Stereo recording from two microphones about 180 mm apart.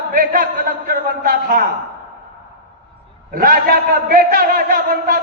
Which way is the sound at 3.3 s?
55° right (ahead or behind).